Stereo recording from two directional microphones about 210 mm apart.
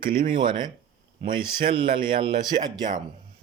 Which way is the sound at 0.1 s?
25° right (ahead or behind).